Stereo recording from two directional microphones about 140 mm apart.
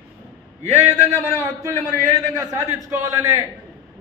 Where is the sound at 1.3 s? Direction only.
20° right (ahead or behind).